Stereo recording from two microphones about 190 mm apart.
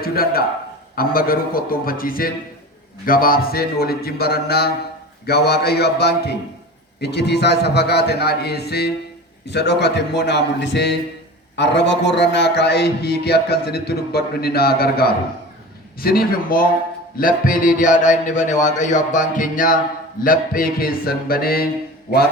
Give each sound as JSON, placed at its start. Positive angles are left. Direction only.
{"t": 0.0, "sound": "a man's voice", "side_deg": 55}